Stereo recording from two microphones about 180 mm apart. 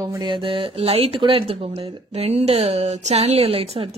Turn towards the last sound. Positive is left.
turn(degrees=-35)  # may be behind; listen again after turning